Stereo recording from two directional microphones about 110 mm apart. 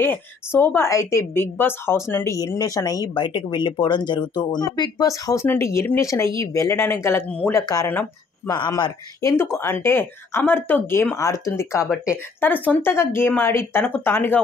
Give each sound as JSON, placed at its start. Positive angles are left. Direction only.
{"t": 0.0, "sound": "a woman's voice", "side_deg": 20}
{"t": 3.2, "sound": "a woman's voice", "side_deg": 45}
{"t": 7.2, "sound": "speech", "side_deg": 10}
{"t": 7.6, "sound": "speech", "side_deg": 30}
{"t": 9.2, "sound": "a woman's voice", "side_deg": 25}
{"t": 11.8, "sound": "speech", "side_deg": -5}
{"t": 12.4, "sound": "a woman's voice", "side_deg": 15}